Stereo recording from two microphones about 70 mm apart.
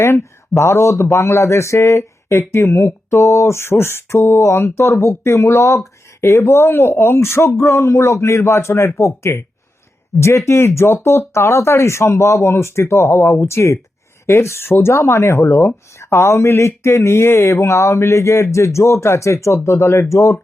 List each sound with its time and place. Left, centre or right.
0.0 s speech: left